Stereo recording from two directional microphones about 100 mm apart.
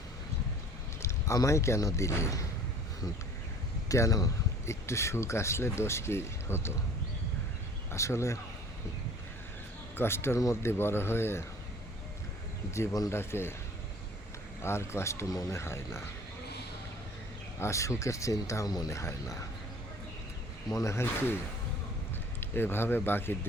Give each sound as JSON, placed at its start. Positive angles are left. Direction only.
{"t": 1.0, "sound": "speech", "side_deg": 30}
{"t": 3.8, "sound": "speech", "side_deg": 35}
{"t": 7.9, "sound": "speech", "side_deg": 30}
{"t": 10.0, "sound": "speech", "side_deg": 25}
{"t": 12.7, "sound": "speech", "side_deg": 30}
{"t": 14.6, "sound": "speech", "side_deg": 25}
{"t": 17.6, "sound": "speech", "side_deg": 30}
{"t": 20.7, "sound": "speech", "side_deg": 30}
{"t": 22.4, "sound": "speech", "side_deg": 20}